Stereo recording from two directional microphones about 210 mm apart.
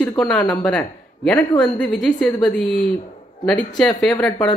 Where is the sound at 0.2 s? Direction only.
5° left (ahead or behind).